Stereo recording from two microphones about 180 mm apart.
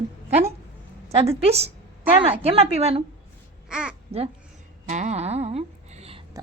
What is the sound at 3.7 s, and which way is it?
Babbling, 5° right (ahead or behind).